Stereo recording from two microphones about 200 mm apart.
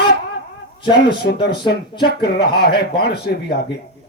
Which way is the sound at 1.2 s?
55° left (ahead or behind).